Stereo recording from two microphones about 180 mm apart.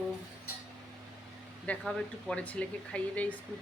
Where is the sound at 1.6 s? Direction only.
5° left (ahead or behind).